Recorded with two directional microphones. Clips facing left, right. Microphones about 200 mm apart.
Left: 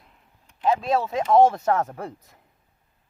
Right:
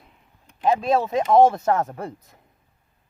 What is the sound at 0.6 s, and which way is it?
Speech, 15° right (ahead or behind).